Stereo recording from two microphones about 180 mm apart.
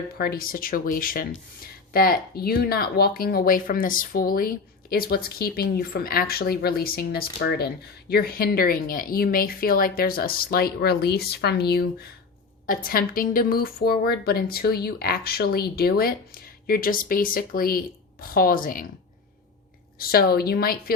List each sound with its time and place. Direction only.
0.2 s speech: 55° left (ahead or behind)
20.0 s speech: 55° left (ahead or behind)